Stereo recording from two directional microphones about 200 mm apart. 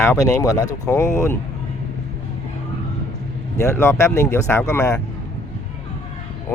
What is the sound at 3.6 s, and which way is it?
Speech, 15° left (ahead or behind).